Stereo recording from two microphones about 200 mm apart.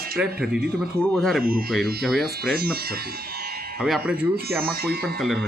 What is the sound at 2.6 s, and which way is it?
Speech, 50° right (ahead or behind).